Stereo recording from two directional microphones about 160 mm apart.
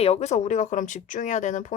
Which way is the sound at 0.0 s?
45° left (ahead or behind).